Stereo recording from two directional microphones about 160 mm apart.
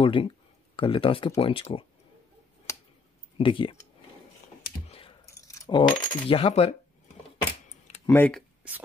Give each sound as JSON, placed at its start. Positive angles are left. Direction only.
{"t": 0.0, "sound": "speech", "side_deg": 30}
{"t": 2.7, "sound": "a sound", "side_deg": 20}
{"t": 3.3, "sound": "speech", "side_deg": 30}
{"t": 4.8, "sound": "computer keyboard", "side_deg": 35}
{"t": 5.2, "sound": "keys jangling", "side_deg": 20}
{"t": 5.8, "sound": "speech", "side_deg": 30}
{"t": 8.1, "sound": "speech", "side_deg": 10}